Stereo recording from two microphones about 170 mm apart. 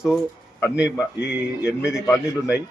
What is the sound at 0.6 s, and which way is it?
A man's voice, 5° right (ahead or behind).